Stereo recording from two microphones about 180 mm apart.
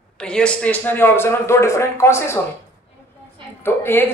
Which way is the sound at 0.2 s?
5° left (ahead or behind).